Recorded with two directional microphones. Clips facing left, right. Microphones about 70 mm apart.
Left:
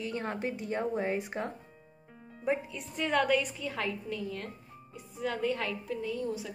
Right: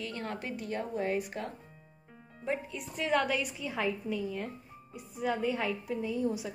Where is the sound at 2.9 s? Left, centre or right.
Centre.